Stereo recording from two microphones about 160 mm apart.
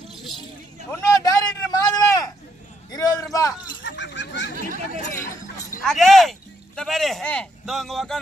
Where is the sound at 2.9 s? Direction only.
25° left (ahead or behind).